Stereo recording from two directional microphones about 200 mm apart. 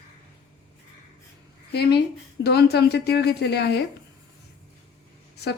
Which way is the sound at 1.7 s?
55° left (ahead or behind).